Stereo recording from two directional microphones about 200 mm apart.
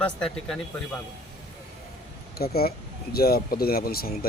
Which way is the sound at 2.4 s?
50° left (ahead or behind).